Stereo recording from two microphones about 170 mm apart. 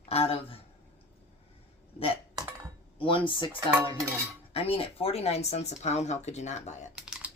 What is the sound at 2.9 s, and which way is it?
Speech, 30° left (ahead or behind).